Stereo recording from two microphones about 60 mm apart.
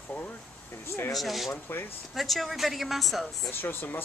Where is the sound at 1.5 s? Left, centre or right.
Left.